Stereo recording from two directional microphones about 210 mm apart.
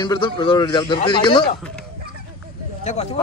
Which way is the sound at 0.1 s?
25° left (ahead or behind).